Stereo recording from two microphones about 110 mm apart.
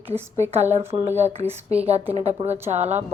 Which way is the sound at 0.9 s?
90° right.